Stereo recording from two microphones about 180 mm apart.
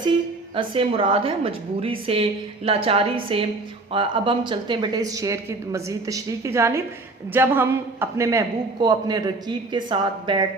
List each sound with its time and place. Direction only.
0.5 s a woman's voice: 30° right (ahead or behind)